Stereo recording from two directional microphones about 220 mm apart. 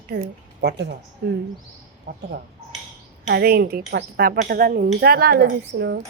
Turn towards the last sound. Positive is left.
turn(degrees=-50)  # may be behind; listen again after turning